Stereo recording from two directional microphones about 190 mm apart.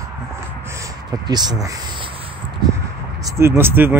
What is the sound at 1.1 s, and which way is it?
Speech, 20° right (ahead or behind).